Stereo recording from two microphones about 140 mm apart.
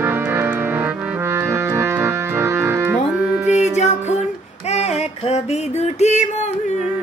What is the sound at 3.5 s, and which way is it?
Music, 55° left (ahead or behind).